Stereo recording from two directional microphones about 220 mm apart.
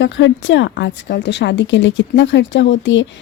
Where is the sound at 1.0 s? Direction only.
45° left (ahead or behind).